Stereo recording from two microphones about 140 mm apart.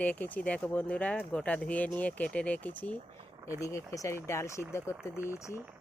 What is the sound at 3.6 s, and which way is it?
Speech, 20° left (ahead or behind).